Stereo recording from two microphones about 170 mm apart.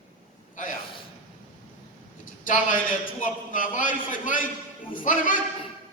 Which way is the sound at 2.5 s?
50° left (ahead or behind).